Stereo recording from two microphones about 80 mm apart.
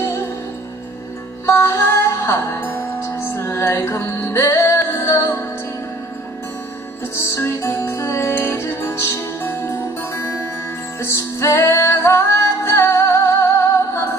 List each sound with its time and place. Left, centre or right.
0.0 s music: left
1.4 s music: left
7.2 s music: left
11.0 s music: left